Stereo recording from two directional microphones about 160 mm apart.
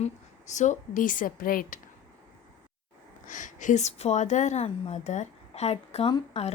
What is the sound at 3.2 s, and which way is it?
Speech, 50° left (ahead or behind).